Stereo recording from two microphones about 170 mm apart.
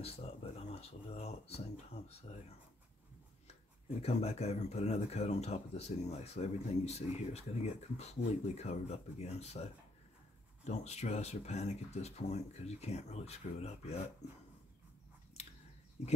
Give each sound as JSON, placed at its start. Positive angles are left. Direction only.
{"t": 0.0, "sound": "speech", "side_deg": 35}
{"t": 4.0, "sound": "speech", "side_deg": 40}